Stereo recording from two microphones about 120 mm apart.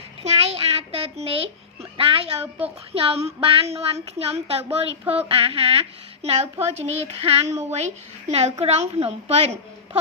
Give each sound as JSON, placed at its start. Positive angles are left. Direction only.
{"t": 0.2, "sound": "a sound", "side_deg": -60}
{"t": 2.6, "sound": "speech", "side_deg": -55}
{"t": 7.5, "sound": "speech", "side_deg": -65}